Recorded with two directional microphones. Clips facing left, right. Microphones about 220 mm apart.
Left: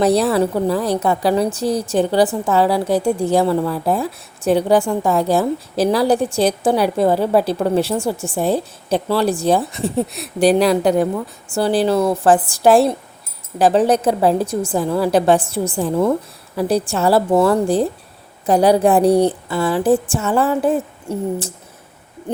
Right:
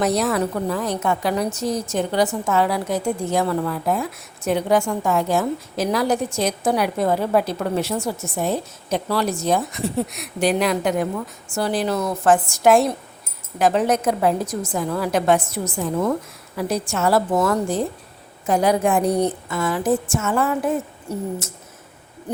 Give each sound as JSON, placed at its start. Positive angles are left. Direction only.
{"t": 0.0, "sound": "a woman's voice", "side_deg": 30}